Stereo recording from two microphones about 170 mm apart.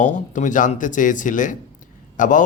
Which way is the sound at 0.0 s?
50° left (ahead or behind).